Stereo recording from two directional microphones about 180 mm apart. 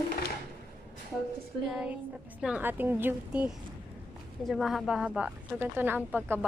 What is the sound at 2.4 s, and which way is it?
Speech, 10° right (ahead or behind).